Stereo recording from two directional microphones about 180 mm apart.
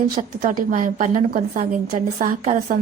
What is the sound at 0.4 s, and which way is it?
A woman's voice, 50° right (ahead or behind).